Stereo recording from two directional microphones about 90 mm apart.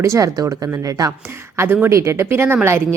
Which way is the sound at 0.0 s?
35° right (ahead or behind).